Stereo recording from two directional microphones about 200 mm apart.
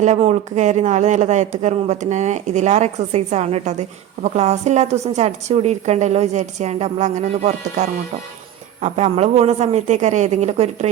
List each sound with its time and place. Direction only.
0.0 s speech: 35° right (ahead or behind)